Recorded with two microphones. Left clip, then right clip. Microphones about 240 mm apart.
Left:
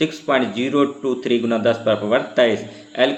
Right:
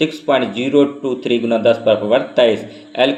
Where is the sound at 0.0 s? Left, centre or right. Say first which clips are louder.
Right 3 dB; centre.